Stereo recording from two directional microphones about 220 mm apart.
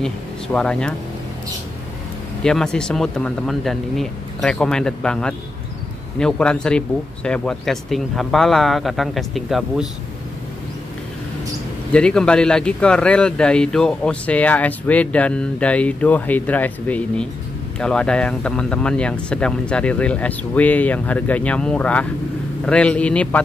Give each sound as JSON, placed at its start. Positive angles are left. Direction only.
{"t": 0.0, "sound": "speech", "side_deg": 5}
{"t": 2.4, "sound": "a man's voice", "side_deg": 5}
{"t": 11.9, "sound": "a man's voice", "side_deg": 5}